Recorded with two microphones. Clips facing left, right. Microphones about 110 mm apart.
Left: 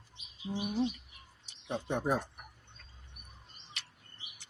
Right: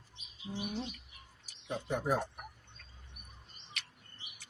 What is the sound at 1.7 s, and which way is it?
Speech, 30° left (ahead or behind).